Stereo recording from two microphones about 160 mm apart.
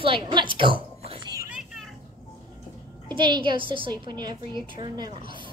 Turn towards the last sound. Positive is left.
turn(degrees=-25)  # may be behind; listen again after turning